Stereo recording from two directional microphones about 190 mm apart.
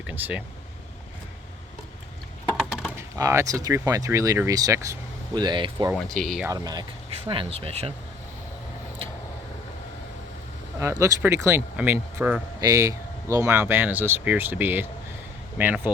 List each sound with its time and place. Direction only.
0.1 s speech: 10° right (ahead or behind)
2.6 s a sound: centre (ahead or behind)
2.9 s speech: 15° right (ahead or behind)
5.9 s speech: centre (ahead or behind)
6.5 s speech: 20° right (ahead or behind)
11.0 s speech: 15° right (ahead or behind)